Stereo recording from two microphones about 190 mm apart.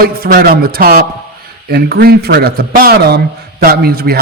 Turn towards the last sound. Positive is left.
turn(degrees=-55)  # may be behind; listen again after turning